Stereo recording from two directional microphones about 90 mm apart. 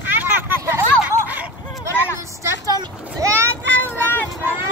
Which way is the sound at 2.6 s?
40° right (ahead or behind).